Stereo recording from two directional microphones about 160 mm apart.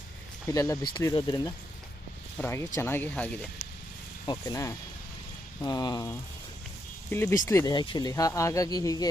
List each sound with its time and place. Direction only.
0.4 s speech: 20° left (ahead or behind)
4.3 s speech: 20° left (ahead or behind)